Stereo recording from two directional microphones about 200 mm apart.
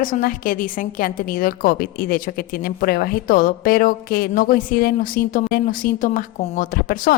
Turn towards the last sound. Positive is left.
turn(degrees=45)  # may be behind; listen again after turning